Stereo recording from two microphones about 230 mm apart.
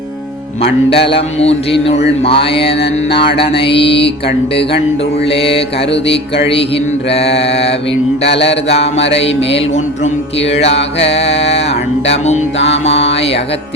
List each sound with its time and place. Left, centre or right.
0.9 s music: left
5.4 s music: left
7.1 s music: left
12.5 s music: left
13.1 s music: left